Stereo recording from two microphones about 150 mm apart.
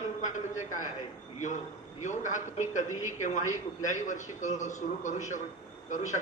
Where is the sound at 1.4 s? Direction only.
55° left (ahead or behind).